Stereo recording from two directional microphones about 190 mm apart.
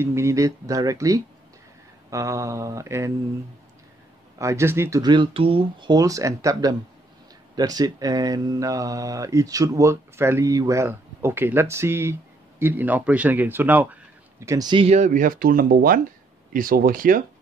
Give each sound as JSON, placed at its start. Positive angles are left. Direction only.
{"t": 0.0, "sound": "speech", "side_deg": -15}
{"t": 4.4, "sound": "speech", "side_deg": -15}